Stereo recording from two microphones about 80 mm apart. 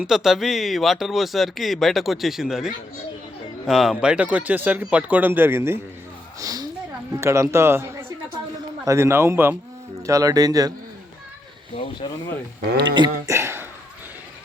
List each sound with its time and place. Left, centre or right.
0.0 s speech: centre; by 5.8 s right
6.4 s a sound: right
7.2 s a man's voice: right
10.1 s speech: right
12.0 s speech: left
12.8 s speech: right
13.2 s throat clearing: right